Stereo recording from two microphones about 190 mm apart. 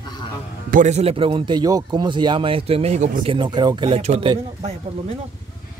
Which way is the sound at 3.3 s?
25° right (ahead or behind).